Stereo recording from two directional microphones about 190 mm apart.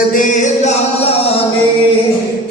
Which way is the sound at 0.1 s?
40° left (ahead or behind).